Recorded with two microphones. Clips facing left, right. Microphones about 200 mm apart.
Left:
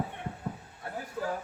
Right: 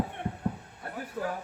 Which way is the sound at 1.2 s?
55° right (ahead or behind).